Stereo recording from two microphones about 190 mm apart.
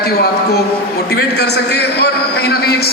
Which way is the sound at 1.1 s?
60° left (ahead or behind).